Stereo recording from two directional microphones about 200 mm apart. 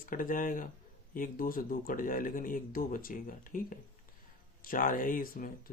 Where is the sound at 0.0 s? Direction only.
45° left (ahead or behind).